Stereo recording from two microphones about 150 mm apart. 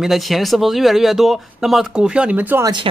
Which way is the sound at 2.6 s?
30° right (ahead or behind).